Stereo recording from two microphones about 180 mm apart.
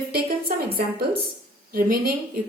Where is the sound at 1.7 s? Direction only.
55° right (ahead or behind).